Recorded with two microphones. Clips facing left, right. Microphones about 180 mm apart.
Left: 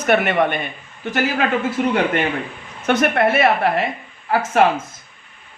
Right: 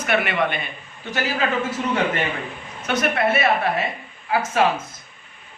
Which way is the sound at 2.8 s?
55° left (ahead or behind).